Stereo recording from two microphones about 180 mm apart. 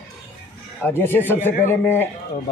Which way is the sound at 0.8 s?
10° left (ahead or behind).